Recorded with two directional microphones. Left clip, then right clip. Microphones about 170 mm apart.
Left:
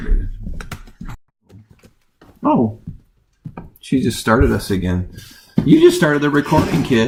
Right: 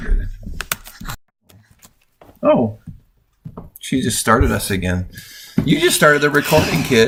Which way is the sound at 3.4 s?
Centre (ahead or behind).